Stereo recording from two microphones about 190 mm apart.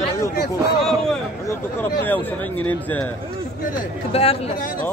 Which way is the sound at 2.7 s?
10° left (ahead or behind).